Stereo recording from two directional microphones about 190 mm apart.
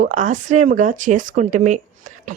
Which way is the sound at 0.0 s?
40° right (ahead or behind).